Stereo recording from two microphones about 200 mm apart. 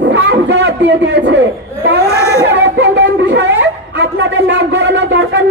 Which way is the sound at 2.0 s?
15° left (ahead or behind).